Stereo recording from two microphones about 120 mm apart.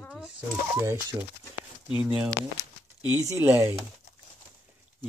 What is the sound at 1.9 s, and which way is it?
Speech, 10° right (ahead or behind).